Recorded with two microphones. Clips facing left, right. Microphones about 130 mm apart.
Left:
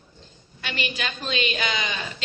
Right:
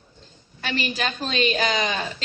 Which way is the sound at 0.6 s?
35° right (ahead or behind).